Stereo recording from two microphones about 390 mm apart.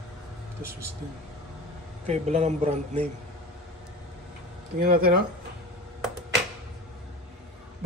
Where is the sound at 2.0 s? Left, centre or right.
Centre.